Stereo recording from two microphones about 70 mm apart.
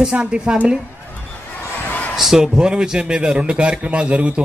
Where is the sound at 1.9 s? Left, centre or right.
Left.